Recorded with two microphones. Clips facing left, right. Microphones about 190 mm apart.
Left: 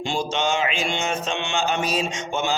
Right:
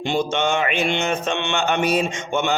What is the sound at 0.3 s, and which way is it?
A man's voice, 55° right (ahead or behind).